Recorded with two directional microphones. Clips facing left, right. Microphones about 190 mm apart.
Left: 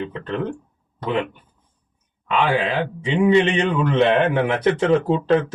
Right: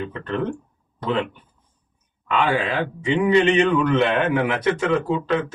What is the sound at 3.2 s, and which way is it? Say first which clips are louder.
A man's voice: left 1 dB; 30° left (ahead or behind).